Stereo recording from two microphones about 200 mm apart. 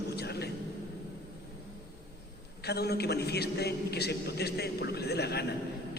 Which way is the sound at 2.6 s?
55° left (ahead or behind).